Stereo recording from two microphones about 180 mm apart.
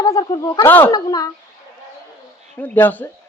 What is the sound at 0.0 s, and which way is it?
Speech, 20° left (ahead or behind).